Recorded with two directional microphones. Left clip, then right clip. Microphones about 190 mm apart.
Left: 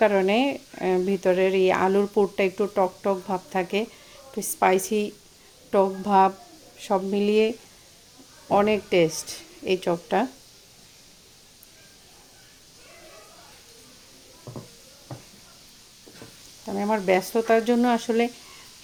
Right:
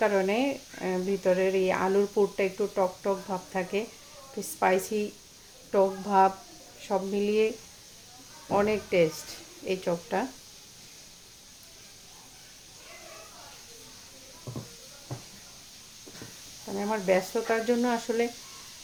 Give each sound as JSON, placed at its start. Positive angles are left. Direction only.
{"t": 0.0, "sound": "speech", "side_deg": 50}
{"t": 16.6, "sound": "speech", "side_deg": 50}